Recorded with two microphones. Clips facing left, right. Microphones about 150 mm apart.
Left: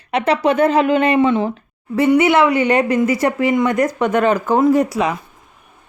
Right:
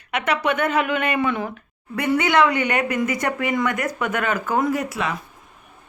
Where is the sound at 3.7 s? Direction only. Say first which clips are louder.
Left 8 dB; 35° left (ahead or behind).